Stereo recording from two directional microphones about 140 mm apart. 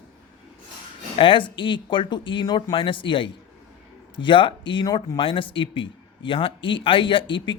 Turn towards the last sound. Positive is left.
turn(degrees=35)  # may be behind; listen again after turning